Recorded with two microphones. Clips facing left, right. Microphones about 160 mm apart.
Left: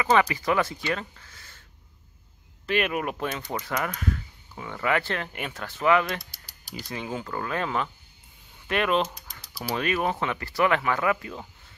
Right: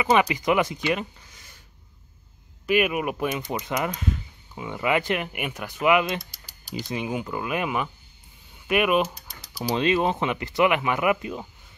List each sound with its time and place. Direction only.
0.0 s speech: 15° right (ahead or behind)
2.6 s speech: 10° right (ahead or behind)